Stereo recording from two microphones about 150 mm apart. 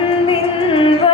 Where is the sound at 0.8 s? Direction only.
35° left (ahead or behind).